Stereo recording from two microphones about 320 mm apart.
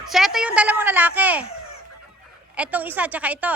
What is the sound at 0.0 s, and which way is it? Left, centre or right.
A woman's voice, centre.